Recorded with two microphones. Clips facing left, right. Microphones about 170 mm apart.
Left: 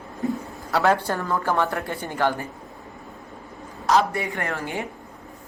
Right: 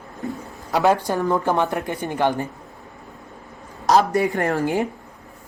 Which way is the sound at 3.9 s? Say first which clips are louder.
Right 4 dB; 40° right (ahead or behind).